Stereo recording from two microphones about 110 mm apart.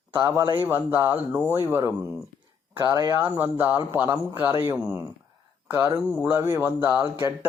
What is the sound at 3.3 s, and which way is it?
Speech, 20° right (ahead or behind).